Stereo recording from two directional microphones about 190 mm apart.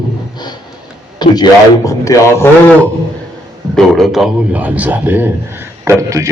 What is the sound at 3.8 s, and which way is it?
A man's voice, centre (ahead or behind).